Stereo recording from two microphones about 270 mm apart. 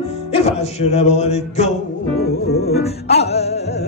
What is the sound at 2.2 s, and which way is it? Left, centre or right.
Music, left.